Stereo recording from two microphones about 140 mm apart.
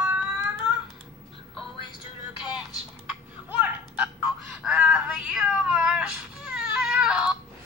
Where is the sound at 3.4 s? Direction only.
10° right (ahead or behind).